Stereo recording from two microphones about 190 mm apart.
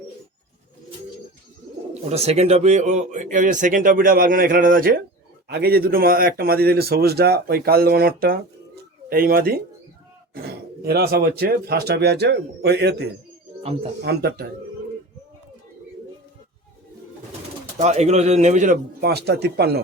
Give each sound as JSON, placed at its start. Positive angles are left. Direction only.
{"t": 2.0, "sound": "speech", "side_deg": -35}
{"t": 17.7, "sound": "speech", "side_deg": -35}
{"t": 18.9, "sound": "speech", "side_deg": -60}